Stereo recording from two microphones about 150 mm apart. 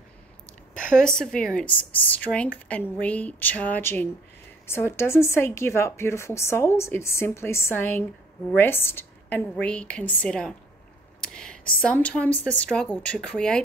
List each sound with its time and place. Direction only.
0.7 s a woman's voice: 5° left (ahead or behind)
11.1 s whispering: 5° left (ahead or behind)
11.8 s a woman's voice: 10° left (ahead or behind)